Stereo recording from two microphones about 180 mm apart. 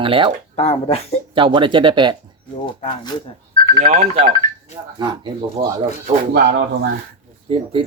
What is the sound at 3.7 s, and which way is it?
Speech, 50° right (ahead or behind).